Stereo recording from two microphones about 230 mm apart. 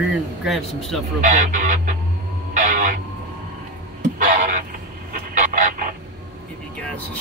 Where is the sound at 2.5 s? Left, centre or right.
Right.